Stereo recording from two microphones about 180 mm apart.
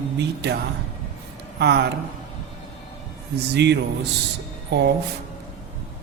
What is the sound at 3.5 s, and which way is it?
Speech, 70° right (ahead or behind).